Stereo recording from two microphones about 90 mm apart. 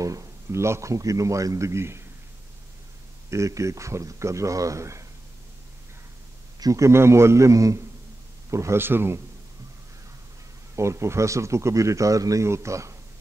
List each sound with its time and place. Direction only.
0.0 s a man's voice: 35° right (ahead or behind)
3.3 s speech: 35° right (ahead or behind)
6.6 s speech: 35° right (ahead or behind)
10.8 s speech: 30° right (ahead or behind)